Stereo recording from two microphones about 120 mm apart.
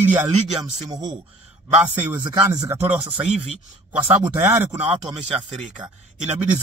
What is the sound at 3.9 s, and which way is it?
Speech, 20° right (ahead or behind).